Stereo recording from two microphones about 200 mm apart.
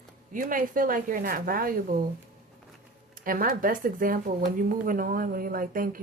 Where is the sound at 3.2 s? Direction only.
45° right (ahead or behind).